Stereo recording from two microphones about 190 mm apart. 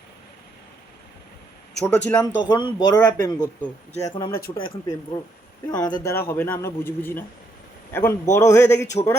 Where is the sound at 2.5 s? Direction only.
25° left (ahead or behind).